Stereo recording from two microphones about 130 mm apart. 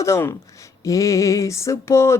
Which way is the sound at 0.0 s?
20° left (ahead or behind).